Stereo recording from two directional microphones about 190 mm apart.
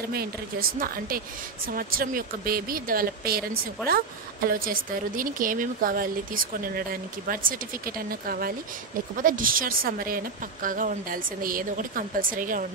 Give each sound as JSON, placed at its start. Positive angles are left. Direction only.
{"t": 0.1, "sound": "speech", "side_deg": -50}